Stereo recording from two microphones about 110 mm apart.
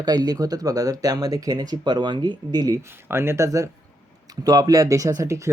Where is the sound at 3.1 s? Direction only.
20° right (ahead or behind).